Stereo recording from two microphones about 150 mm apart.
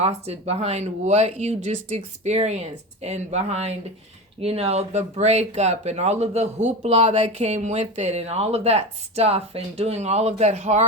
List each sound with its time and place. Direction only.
0.0 s speech: 45° right (ahead or behind)